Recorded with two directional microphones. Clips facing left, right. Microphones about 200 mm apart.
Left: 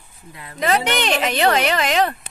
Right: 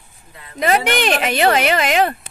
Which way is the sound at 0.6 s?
10° right (ahead or behind).